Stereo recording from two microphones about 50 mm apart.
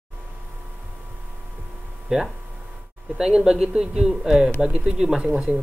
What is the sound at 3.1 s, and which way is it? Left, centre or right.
A man's voice, centre.